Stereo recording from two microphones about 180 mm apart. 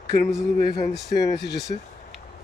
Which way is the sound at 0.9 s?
70° left (ahead or behind).